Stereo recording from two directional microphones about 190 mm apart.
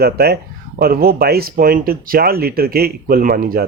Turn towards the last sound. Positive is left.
turn(degrees=-50)  # may be behind; listen again after turning